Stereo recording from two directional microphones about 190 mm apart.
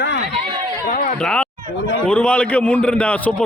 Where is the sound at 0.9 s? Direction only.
45° left (ahead or behind).